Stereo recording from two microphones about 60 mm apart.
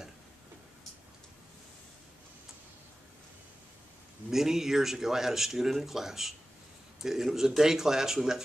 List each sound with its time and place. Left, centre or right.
4.3 s speech: centre